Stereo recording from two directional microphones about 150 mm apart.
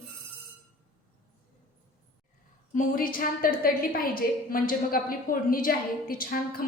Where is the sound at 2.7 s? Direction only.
65° left (ahead or behind).